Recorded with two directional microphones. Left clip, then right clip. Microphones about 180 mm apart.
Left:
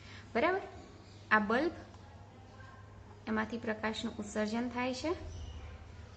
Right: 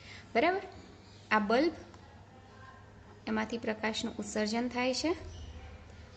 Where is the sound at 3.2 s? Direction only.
40° right (ahead or behind).